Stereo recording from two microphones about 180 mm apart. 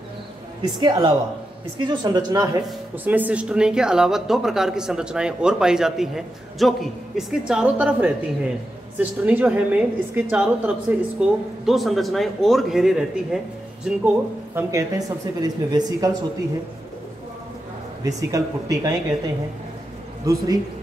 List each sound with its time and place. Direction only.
0.6 s speech: 25° right (ahead or behind)
3.1 s a woman's voice: 10° right (ahead or behind)
18.0 s speech: 20° right (ahead or behind)
20.2 s speech: 20° right (ahead or behind)